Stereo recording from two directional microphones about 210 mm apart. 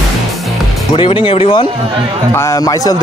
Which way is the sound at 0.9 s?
25° left (ahead or behind).